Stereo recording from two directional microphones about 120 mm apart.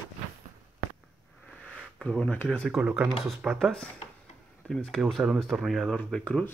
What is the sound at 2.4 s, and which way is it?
Speech, 10° left (ahead or behind).